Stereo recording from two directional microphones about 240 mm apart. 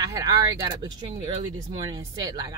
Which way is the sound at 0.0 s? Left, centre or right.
Centre.